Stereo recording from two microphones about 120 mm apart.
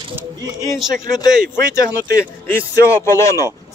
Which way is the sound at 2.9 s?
25° left (ahead or behind).